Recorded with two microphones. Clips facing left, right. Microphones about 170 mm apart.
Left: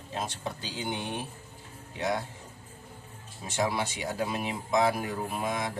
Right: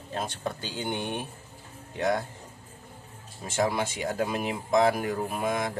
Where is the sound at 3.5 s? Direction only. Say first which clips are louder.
Right 3 dB; 50° right (ahead or behind).